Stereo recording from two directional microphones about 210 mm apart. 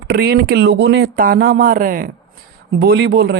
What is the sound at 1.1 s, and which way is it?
Speech, 45° right (ahead or behind).